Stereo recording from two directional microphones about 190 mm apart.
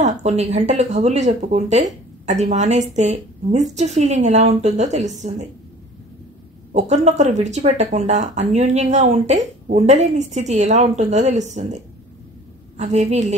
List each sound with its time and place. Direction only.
0.0 s speech: 35° right (ahead or behind)
6.7 s speech: 40° right (ahead or behind)
12.7 s speech: 35° right (ahead or behind)